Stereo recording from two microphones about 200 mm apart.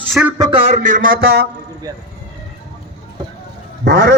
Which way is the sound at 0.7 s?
40° right (ahead or behind).